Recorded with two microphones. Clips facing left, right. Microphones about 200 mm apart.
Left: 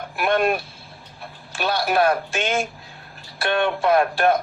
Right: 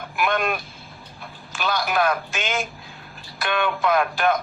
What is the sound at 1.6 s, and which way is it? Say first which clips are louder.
Speech: left 3 dB; 30° left (ahead or behind).